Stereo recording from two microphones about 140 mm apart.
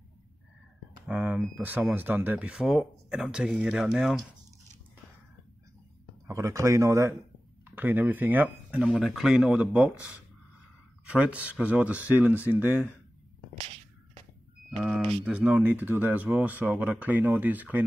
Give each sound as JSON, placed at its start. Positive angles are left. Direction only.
{"t": 1.0, "sound": "speech", "side_deg": -10}
{"t": 6.2, "sound": "a man's voice", "side_deg": -20}
{"t": 15.2, "sound": "speech", "side_deg": -10}